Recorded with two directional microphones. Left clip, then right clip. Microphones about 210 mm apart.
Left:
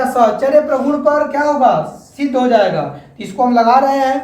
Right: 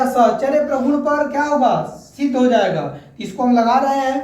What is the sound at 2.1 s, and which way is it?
A woman's voice, 20° left (ahead or behind).